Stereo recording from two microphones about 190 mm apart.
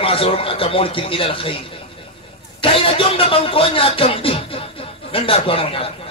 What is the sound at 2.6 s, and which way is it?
A man's voice, 30° left (ahead or behind).